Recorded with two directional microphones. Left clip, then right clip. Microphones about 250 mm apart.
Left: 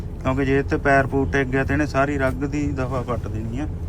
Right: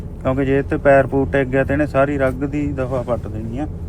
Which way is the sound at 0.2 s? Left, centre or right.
Centre.